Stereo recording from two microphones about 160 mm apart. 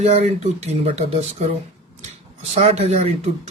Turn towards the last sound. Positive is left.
turn(degrees=-45)  # may be behind; listen again after turning